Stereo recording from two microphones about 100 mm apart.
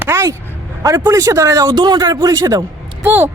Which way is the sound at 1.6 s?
45° right (ahead or behind).